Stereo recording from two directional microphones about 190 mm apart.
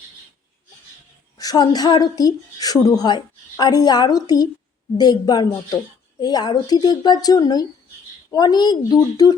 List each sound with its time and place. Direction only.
1.4 s speech: 20° left (ahead or behind)